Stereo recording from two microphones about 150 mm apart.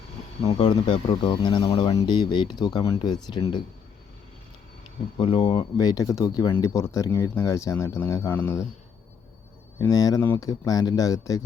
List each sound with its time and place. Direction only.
0.6 s speech: 35° left (ahead or behind)
5.2 s speech: 35° left (ahead or behind); by 8.6 s 15° left (ahead or behind)
9.7 s speech: 20° left (ahead or behind)